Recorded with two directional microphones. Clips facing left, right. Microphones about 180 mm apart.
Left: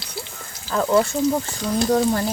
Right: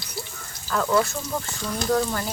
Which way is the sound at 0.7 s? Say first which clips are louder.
Left 4 dB; 25° left (ahead or behind).